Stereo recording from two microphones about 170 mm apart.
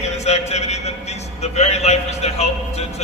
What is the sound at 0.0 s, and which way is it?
A man's voice, 40° left (ahead or behind).